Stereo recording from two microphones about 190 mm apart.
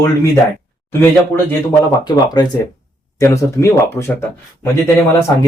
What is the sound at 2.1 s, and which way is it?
Speech, 20° left (ahead or behind).